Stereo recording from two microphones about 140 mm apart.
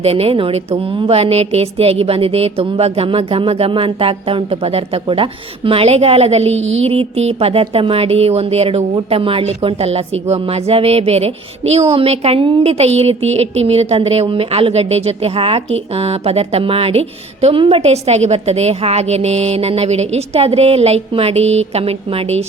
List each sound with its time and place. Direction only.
0.0 s a woman's voice: 45° right (ahead or behind)